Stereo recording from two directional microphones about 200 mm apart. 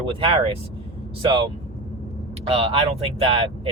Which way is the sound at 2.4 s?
25° right (ahead or behind).